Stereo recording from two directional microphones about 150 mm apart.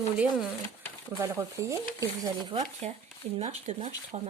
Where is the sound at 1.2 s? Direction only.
20° right (ahead or behind).